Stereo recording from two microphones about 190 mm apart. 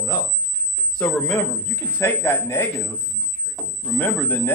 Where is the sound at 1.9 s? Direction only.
10° left (ahead or behind).